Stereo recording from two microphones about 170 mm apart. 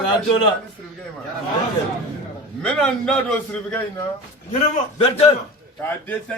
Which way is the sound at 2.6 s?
5° left (ahead or behind).